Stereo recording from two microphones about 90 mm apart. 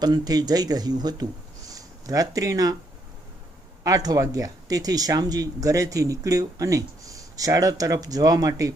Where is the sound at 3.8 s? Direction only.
45° right (ahead or behind).